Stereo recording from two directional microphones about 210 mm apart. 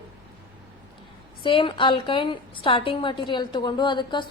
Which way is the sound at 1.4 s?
25° left (ahead or behind).